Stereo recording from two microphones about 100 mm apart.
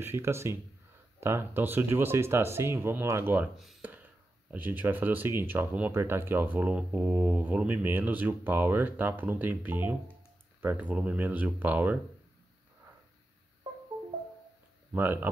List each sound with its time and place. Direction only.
0.0 s speech: 25° right (ahead or behind)
3.8 s a sound: 15° right (ahead or behind)
4.5 s speech: 20° right (ahead or behind)
14.9 s speech: 20° right (ahead or behind)